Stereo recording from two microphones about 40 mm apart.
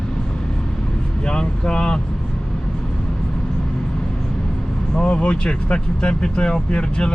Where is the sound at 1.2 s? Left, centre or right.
Centre.